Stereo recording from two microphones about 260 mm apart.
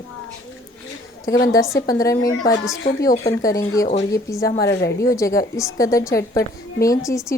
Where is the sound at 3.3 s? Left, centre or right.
Centre.